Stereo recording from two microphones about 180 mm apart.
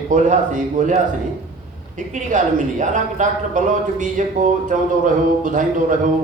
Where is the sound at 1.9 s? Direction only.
45° right (ahead or behind).